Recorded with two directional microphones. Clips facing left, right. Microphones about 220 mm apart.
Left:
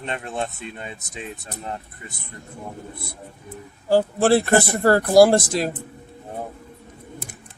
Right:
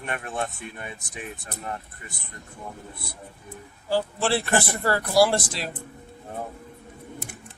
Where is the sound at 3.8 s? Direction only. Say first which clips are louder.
Left 8 dB; 45° left (ahead or behind).